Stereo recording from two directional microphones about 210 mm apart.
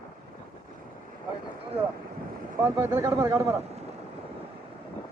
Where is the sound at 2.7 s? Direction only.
15° right (ahead or behind).